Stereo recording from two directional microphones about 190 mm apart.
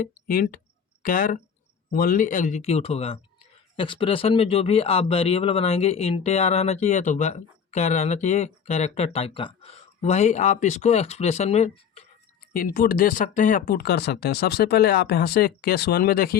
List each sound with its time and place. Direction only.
0.3 s a man's voice: 50° left (ahead or behind); by 12.0 s 35° left (ahead or behind)
12.5 s speech: 50° left (ahead or behind)